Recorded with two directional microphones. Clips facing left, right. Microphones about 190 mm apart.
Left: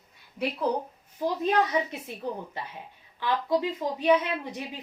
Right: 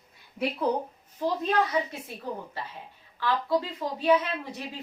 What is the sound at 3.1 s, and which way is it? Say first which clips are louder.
A woman's voice: even; 20° left (ahead or behind).